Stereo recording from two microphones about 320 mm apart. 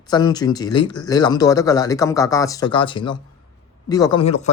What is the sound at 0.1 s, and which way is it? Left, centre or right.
Speech, centre.